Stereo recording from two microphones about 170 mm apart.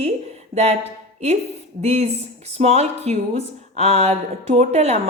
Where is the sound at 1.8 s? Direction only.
40° right (ahead or behind).